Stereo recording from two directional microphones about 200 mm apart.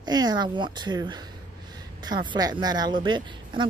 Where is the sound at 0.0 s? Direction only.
20° right (ahead or behind).